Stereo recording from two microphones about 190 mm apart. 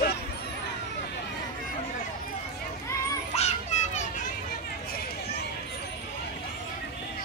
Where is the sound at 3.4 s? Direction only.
35° left (ahead or behind).